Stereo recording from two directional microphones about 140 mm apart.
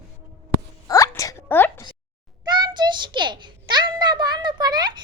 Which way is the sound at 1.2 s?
20° left (ahead or behind).